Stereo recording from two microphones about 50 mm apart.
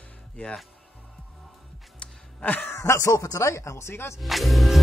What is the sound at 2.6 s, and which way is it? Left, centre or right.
Speech, left.